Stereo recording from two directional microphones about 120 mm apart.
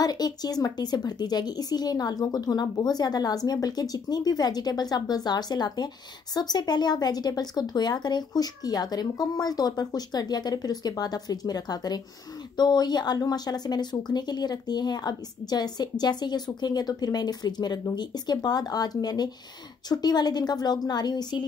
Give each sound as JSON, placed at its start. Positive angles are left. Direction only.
{"t": 0.0, "sound": "speech", "side_deg": 35}